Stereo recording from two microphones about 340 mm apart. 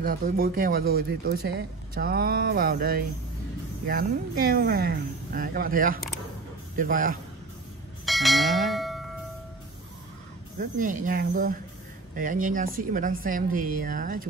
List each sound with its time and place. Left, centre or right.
0.0 s speech: right
8.0 s bell: centre
10.6 s speech: right